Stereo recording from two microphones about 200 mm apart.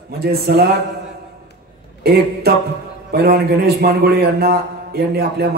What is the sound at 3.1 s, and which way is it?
A man's voice, 50° right (ahead or behind).